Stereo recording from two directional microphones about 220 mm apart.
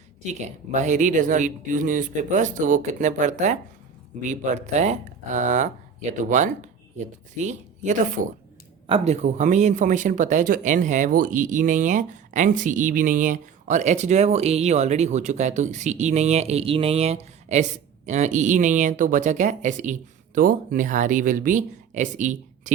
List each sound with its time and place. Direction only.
0.3 s speech: 30° right (ahead or behind)